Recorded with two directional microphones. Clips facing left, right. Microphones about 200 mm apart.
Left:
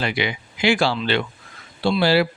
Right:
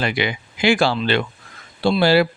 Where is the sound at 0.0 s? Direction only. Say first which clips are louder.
Right 2 dB; 50° right (ahead or behind).